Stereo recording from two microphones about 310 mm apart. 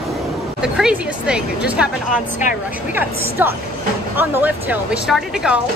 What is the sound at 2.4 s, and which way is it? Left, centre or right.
Speech, left.